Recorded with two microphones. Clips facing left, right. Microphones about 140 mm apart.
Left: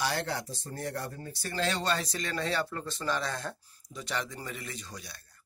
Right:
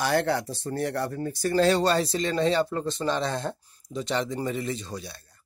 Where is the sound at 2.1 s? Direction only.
25° right (ahead or behind).